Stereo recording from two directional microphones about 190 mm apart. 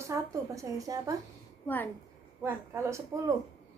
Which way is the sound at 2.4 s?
10° right (ahead or behind).